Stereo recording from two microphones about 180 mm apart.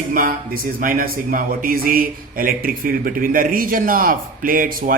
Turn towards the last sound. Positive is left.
turn(degrees=-50)  # may be behind; listen again after turning